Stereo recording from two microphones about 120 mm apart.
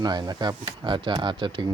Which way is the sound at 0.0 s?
35° right (ahead or behind).